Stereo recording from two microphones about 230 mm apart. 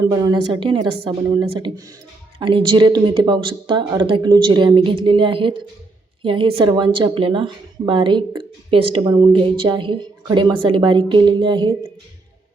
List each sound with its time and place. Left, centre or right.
0.0 s a woman's voice: centre